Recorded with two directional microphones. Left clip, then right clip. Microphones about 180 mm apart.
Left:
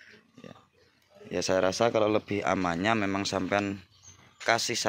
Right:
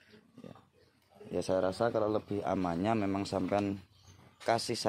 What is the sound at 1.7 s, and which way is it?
Speech, 55° left (ahead or behind).